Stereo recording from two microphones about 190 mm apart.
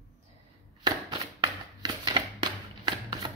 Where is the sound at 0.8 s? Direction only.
20° right (ahead or behind).